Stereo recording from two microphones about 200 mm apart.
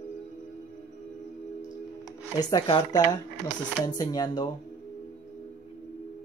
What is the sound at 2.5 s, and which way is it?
Speech, 20° left (ahead or behind).